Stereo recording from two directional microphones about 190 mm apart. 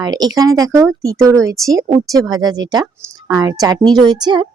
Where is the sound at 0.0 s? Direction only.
20° right (ahead or behind).